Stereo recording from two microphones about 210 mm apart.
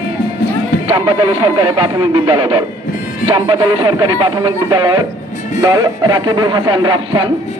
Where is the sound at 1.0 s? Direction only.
15° right (ahead or behind).